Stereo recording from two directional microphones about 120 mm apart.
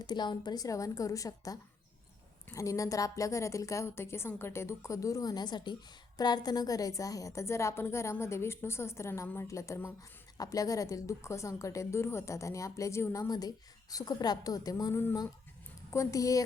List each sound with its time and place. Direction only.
0.0 s a woman's voice: 35° left (ahead or behind)
13.9 s a woman's voice: 35° left (ahead or behind)